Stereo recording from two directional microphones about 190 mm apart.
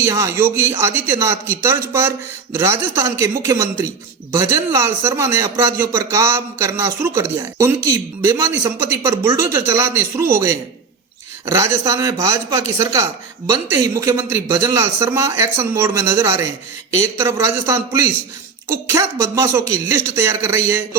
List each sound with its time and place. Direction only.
0.0 s speech: 15° right (ahead or behind)